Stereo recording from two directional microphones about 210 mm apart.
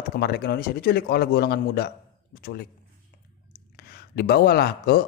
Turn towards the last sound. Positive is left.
turn(degrees=45)  # may be behind; listen again after turning